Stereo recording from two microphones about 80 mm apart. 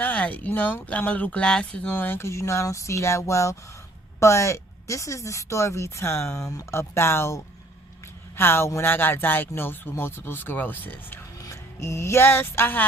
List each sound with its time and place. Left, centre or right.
0.0 s speech: centre
11.3 s music: left